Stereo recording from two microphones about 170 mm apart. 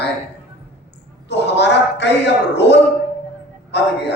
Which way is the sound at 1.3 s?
90° left.